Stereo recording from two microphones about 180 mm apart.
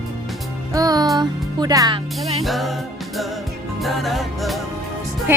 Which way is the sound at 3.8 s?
Centre (ahead or behind).